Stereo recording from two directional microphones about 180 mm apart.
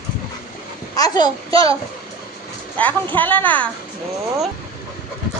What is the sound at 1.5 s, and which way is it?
Speech, 30° right (ahead or behind).